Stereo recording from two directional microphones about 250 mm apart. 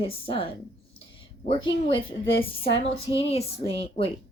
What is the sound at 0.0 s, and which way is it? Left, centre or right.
Speech, left.